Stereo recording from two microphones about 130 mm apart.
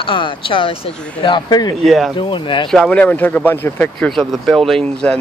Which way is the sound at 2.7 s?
5° left (ahead or behind).